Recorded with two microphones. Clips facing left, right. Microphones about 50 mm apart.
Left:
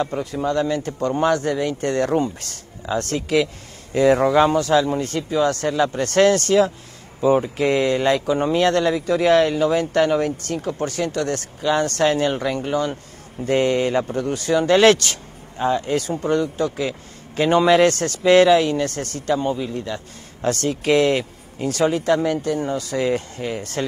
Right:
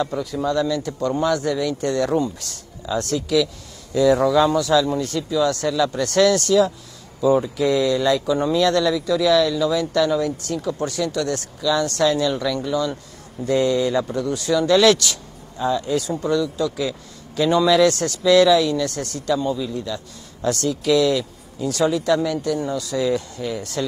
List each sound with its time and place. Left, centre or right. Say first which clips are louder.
0.0 s speech: even; left